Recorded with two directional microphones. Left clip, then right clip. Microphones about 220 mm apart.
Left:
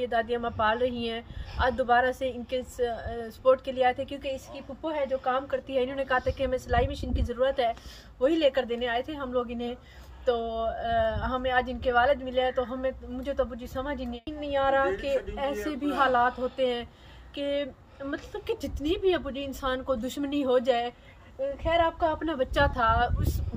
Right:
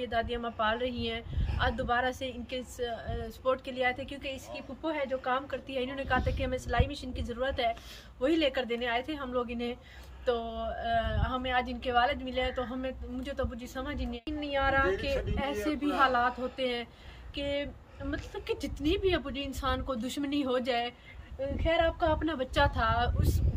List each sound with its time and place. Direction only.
0.0 s a woman's voice: 10° left (ahead or behind)
14.9 s speech: 30° right (ahead or behind)
16.0 s a woman's voice: 10° left (ahead or behind)
16.3 s speech: 5° right (ahead or behind)
16.5 s a woman's voice: 10° left (ahead or behind)